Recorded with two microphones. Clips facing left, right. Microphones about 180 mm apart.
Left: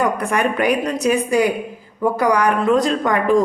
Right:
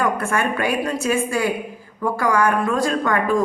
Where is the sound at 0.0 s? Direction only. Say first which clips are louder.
Left 2 dB; 15° left (ahead or behind).